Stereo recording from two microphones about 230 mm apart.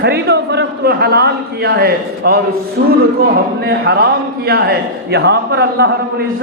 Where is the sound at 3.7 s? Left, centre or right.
Right.